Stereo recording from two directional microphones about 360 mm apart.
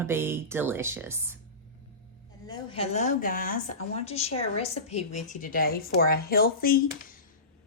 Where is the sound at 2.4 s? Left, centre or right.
Centre.